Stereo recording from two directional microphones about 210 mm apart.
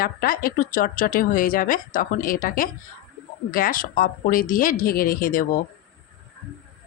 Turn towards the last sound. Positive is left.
turn(degrees=40)  # may be behind; listen again after turning